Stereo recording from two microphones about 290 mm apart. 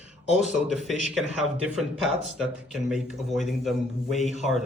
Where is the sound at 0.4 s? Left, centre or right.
Centre.